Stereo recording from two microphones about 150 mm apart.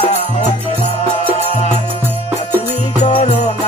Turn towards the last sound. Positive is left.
turn(degrees=50)  # may be behind; listen again after turning